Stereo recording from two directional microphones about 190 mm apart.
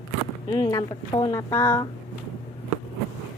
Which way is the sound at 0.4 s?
25° left (ahead or behind).